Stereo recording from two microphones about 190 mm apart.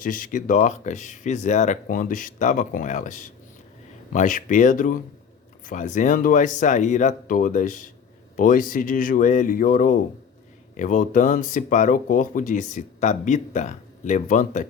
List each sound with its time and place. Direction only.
0.0 s speech: 45° left (ahead or behind)